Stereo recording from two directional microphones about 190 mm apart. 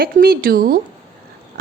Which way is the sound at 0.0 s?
50° right (ahead or behind).